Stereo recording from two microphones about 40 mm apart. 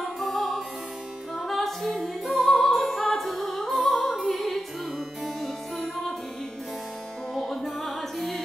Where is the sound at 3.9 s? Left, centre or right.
Centre.